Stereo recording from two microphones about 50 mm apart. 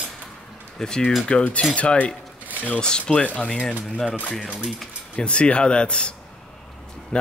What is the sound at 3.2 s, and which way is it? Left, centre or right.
Speech, left.